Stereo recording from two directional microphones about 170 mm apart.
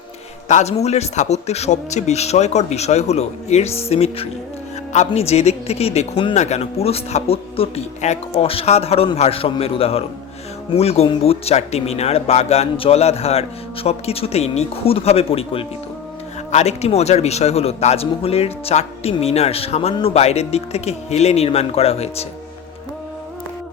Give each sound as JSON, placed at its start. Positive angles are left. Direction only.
{"t": 0.4, "sound": "speech", "side_deg": 40}